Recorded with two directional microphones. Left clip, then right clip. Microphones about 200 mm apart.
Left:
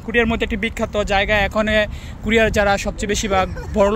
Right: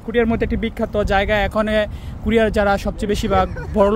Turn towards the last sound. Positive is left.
turn(degrees=-20)  # may be behind; listen again after turning